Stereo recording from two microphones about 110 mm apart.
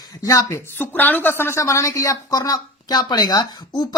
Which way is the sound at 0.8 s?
15° left (ahead or behind).